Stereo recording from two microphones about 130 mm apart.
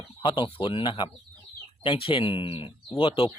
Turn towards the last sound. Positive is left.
turn(degrees=45)  # may be behind; listen again after turning